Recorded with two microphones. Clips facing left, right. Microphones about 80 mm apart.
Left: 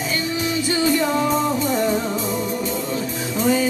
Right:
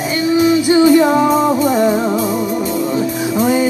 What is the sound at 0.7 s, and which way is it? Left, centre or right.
Music, centre.